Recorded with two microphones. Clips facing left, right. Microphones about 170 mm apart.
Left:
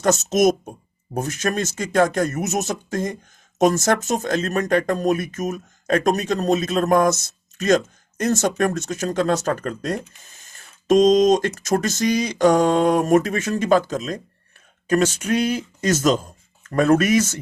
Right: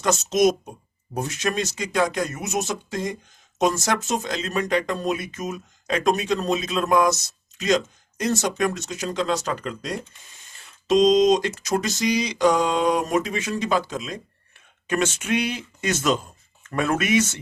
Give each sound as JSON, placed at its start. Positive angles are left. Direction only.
{"t": 0.0, "sound": "speech", "side_deg": 45}